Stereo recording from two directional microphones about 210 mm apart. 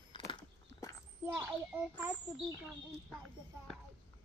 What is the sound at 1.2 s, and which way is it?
Speech, 10° right (ahead or behind).